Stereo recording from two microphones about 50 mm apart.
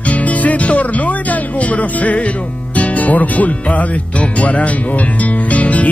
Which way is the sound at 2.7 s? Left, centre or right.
Left.